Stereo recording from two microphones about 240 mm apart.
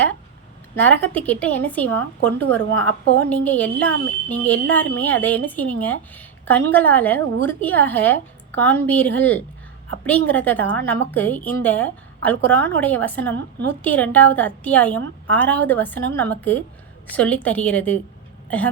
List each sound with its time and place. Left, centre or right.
0.8 s speech: centre
13.3 s a woman's voice: right
13.8 s a woman's voice: centre